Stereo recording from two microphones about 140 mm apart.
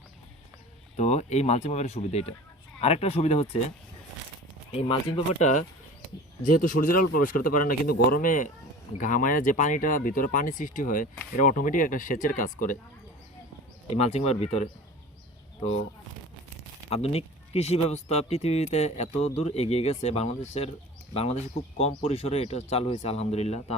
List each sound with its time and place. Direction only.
0.9 s speech: 55° left (ahead or behind)
4.7 s speech: 45° left (ahead or behind)
6.4 s speech: 75° left (ahead or behind)
13.9 s speech: 50° left (ahead or behind)
16.9 s speech: 45° left (ahead or behind)